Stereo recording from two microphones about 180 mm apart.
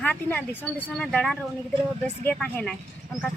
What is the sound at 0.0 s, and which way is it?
Speech, 10° left (ahead or behind).